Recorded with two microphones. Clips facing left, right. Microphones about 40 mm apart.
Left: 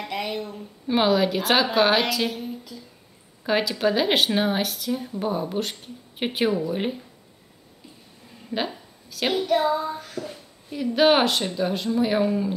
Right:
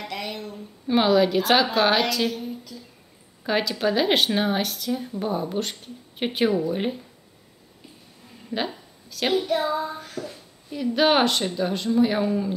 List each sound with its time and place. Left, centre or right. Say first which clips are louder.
0.0 s a sound: left 3 dB; centre
0.8 s speech: right 1 dB; centre
8.5 s a woman's voice: even; centre